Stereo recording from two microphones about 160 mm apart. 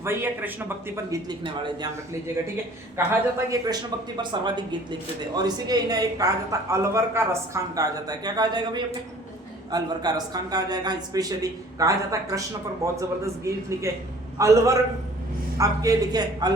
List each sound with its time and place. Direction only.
0.0 s speech: 15° right (ahead or behind)
1.3 s a woman's voice: 30° right (ahead or behind)
3.1 s a woman's voice: 20° right (ahead or behind)